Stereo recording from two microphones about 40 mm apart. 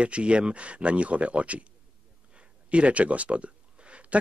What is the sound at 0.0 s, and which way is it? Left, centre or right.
Speech, right.